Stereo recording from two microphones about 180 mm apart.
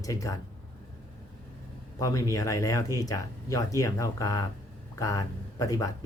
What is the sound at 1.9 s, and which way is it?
Speech, 20° left (ahead or behind).